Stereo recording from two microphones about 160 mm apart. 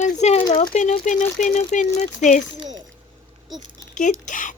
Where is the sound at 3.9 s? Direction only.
50° left (ahead or behind).